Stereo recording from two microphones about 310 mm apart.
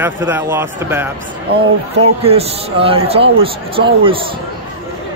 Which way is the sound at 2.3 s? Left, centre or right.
Centre.